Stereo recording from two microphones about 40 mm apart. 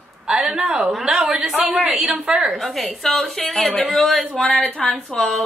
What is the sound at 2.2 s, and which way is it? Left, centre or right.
Speech, centre.